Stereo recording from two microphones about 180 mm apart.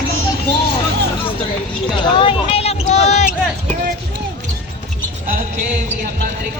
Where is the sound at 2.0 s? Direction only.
30° left (ahead or behind).